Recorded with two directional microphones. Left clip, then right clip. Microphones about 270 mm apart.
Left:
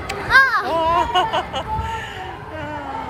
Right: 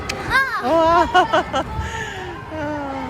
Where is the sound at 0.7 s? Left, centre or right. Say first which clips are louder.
Right 3 dB; right.